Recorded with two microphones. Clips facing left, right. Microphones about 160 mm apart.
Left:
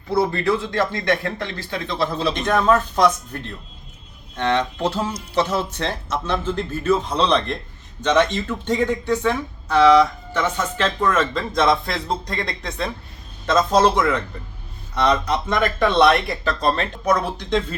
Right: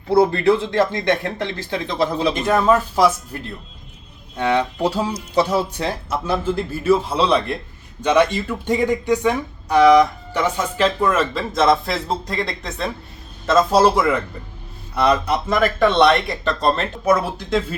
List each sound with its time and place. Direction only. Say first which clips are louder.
0.1 s speech: right 5 dB; 30° right (ahead or behind); by 17.7 s 5° right (ahead or behind)